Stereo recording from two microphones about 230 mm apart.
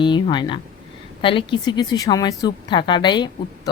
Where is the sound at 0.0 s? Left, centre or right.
Centre.